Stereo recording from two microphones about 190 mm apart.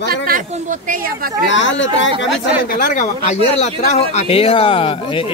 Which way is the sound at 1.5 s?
75° left (ahead or behind).